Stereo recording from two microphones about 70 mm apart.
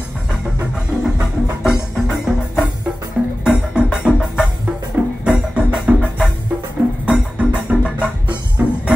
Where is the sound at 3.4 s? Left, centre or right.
Centre.